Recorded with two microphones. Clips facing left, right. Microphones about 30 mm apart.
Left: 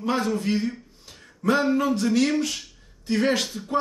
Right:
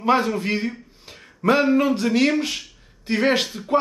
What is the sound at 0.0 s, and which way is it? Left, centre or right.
Speech, right.